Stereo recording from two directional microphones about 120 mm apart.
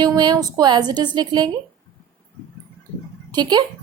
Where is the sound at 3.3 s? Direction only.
35° right (ahead or behind).